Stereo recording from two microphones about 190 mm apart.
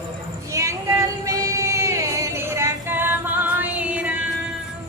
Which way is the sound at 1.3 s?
15° right (ahead or behind).